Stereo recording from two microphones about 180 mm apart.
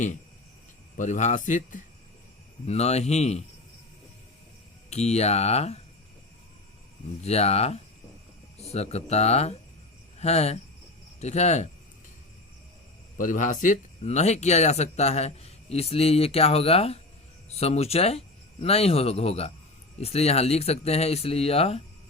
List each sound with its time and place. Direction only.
0.9 s speech: 40° left (ahead or behind)
4.9 s speech: 35° left (ahead or behind)
7.2 s speech: 35° left (ahead or behind)
13.1 s speech: 45° left (ahead or behind)